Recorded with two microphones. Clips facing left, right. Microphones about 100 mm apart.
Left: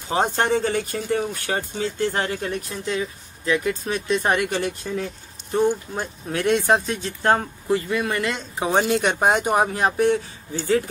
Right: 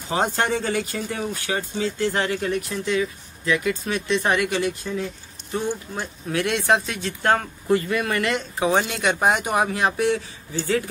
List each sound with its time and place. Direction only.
0.1 s speech: 30° left (ahead or behind)
1.5 s speech: 45° left (ahead or behind)
7.2 s speech: 20° left (ahead or behind)
8.7 s speech: 40° left (ahead or behind)